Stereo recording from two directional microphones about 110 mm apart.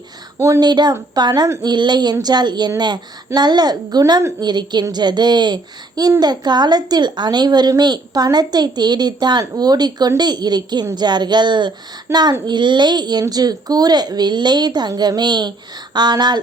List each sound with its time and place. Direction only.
0.3 s speech: 25° right (ahead or behind)
0.6 s a child's voice: 40° right (ahead or behind)